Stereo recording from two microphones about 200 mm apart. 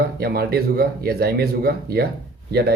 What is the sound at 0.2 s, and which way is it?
Speech, 50° right (ahead or behind).